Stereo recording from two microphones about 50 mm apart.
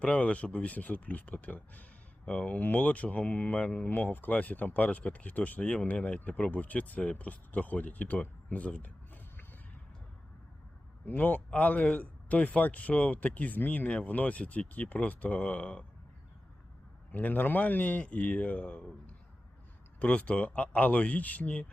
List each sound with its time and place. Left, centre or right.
0.0 s speech: left
11.1 s speech: left
17.1 s speech: left
20.0 s speech: left